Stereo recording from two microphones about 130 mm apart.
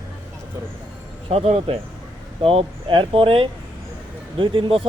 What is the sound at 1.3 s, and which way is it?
Speech, 50° right (ahead or behind).